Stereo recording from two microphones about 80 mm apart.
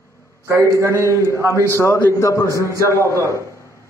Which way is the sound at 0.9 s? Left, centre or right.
Left.